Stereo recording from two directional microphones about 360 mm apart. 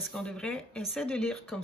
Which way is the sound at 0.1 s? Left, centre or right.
Centre.